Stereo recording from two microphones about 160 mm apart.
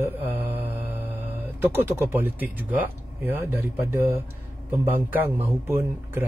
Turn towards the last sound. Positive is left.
turn(degrees=-15)  # may be behind; listen again after turning